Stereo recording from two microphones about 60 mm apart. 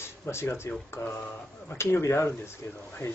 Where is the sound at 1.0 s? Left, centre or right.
Left.